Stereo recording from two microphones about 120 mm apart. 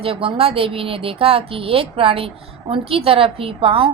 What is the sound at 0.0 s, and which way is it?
A woman's voice, 50° right (ahead or behind).